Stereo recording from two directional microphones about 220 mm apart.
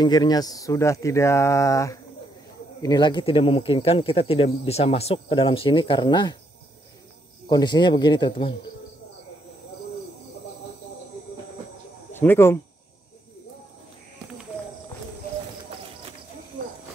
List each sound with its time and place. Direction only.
0.0 s speech: 20° left (ahead or behind)
7.4 s speech: 20° left (ahead or behind)
12.1 s speech: 10° left (ahead or behind)